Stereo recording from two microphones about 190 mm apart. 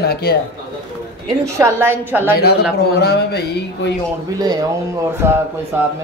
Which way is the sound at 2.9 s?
60° left (ahead or behind).